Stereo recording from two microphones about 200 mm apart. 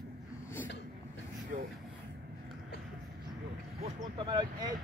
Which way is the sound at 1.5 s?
40° right (ahead or behind).